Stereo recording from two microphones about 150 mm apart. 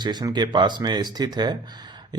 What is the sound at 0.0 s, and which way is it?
Speech, 30° right (ahead or behind).